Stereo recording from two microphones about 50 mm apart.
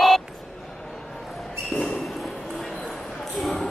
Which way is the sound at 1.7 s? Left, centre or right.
Centre.